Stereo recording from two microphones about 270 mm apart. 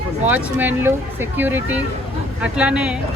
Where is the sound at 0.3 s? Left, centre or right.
Centre.